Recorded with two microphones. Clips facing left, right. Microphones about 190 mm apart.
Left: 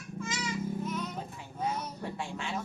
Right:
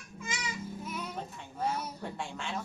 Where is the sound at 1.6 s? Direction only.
10° right (ahead or behind).